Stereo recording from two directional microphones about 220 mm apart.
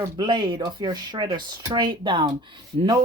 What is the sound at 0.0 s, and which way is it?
Speech, 20° right (ahead or behind).